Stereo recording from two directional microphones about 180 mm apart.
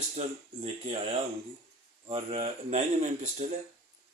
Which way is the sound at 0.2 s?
35° right (ahead or behind).